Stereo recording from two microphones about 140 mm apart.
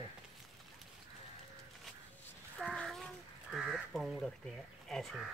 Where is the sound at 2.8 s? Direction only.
5° left (ahead or behind).